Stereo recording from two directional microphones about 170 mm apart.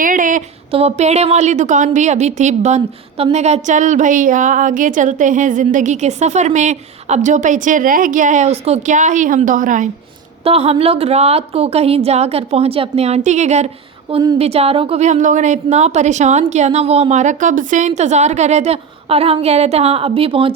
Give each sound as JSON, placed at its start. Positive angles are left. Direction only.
{"t": 0.0, "sound": "a sound", "side_deg": -50}
{"t": 0.7, "sound": "a woman's voice", "side_deg": -35}
{"t": 10.4, "sound": "a woman's voice", "side_deg": -35}
{"t": 14.1, "sound": "a woman's voice", "side_deg": -25}
{"t": 14.3, "sound": "a woman's voice", "side_deg": -35}